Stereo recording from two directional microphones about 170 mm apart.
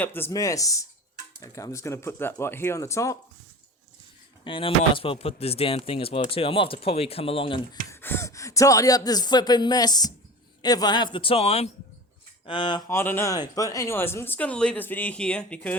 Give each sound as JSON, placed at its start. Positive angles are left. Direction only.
{"t": 0.0, "sound": "speech", "side_deg": 10}
{"t": 4.4, "sound": "speech", "side_deg": 30}
{"t": 7.9, "sound": "speech", "side_deg": 15}
{"t": 12.9, "sound": "speech", "side_deg": 15}